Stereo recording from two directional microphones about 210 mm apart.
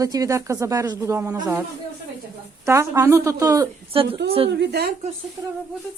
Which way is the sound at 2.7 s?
15° right (ahead or behind).